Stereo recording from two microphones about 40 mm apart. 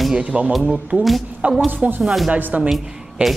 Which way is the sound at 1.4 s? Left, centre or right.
Right.